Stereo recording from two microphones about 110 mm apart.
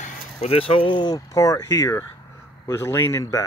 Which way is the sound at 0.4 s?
65° left (ahead or behind).